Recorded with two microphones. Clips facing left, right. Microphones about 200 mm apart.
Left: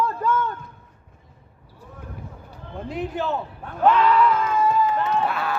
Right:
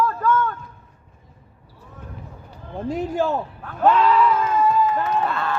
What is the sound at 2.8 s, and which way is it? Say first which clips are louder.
Speech: right 4 dB; 45° right (ahead or behind).